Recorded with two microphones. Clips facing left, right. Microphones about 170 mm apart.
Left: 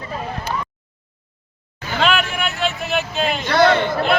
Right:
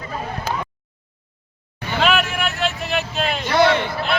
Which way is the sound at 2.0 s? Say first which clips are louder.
Even; centre (ahead or behind).